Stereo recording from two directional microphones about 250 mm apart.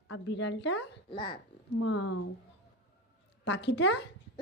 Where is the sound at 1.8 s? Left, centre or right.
Left.